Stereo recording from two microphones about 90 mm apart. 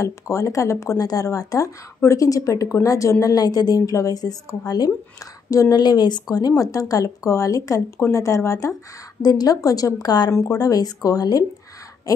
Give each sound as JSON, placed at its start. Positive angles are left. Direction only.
{"t": 0.0, "sound": "speech", "side_deg": 35}
{"t": 5.8, "sound": "speech", "side_deg": 55}
{"t": 6.3, "sound": "speech", "side_deg": 40}
{"t": 9.2, "sound": "speech", "side_deg": 45}